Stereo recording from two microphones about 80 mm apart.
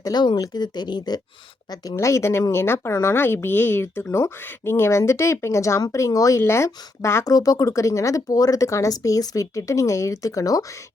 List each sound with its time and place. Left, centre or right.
0.0 s speech: left
1.7 s speech: left
7.3 s speech: left